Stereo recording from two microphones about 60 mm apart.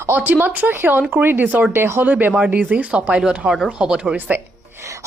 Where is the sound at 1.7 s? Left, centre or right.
Right.